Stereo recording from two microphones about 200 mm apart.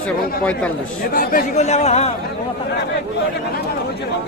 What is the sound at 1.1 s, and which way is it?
Speech, 45° left (ahead or behind).